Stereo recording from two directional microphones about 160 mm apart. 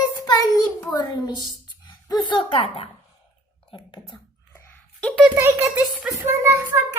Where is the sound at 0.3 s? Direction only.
25° left (ahead or behind).